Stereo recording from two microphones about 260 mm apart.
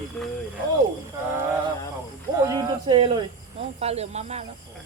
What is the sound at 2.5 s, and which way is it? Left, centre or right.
Cricket, centre.